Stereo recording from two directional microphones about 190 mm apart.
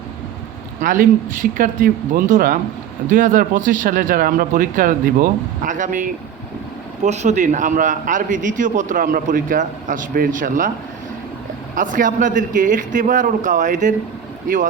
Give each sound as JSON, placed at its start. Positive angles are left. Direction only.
{"t": 0.8, "sound": "a man's voice", "side_deg": -45}
{"t": 11.7, "sound": "a man's voice", "side_deg": -45}